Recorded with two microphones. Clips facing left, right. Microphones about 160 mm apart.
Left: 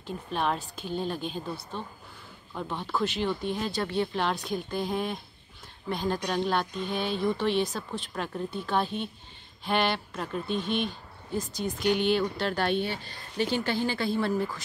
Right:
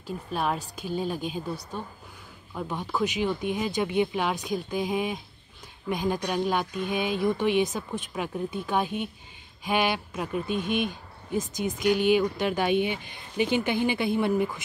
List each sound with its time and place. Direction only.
0.0 s speech: 5° right (ahead or behind)
11.9 s speech: 10° right (ahead or behind)